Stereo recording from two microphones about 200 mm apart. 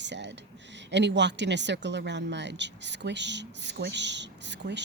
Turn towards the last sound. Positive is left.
turn(degrees=-60)  # may be behind; listen again after turning